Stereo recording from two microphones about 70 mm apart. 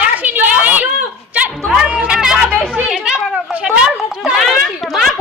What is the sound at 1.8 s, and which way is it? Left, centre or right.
Music, centre.